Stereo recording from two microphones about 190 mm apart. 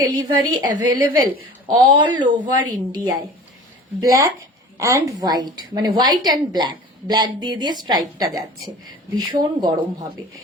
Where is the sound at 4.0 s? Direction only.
20° right (ahead or behind).